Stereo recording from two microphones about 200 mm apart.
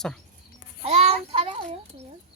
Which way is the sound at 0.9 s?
30° right (ahead or behind).